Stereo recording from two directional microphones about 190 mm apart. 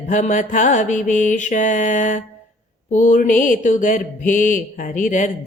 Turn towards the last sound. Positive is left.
turn(degrees=40)  # may be behind; listen again after turning